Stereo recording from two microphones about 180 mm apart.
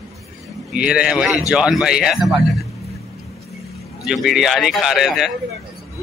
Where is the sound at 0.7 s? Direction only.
5° right (ahead or behind).